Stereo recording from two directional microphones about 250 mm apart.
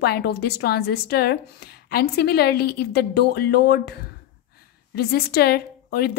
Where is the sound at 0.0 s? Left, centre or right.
Left.